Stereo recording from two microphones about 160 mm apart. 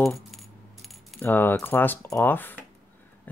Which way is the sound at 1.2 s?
10° left (ahead or behind).